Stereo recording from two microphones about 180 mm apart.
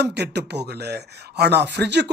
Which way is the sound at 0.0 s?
70° right (ahead or behind).